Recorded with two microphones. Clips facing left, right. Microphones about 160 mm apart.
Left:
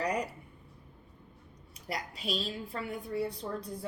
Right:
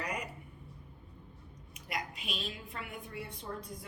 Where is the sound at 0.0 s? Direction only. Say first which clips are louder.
Left 7 dB; 35° left (ahead or behind).